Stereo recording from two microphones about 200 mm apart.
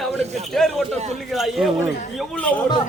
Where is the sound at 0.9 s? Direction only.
35° right (ahead or behind).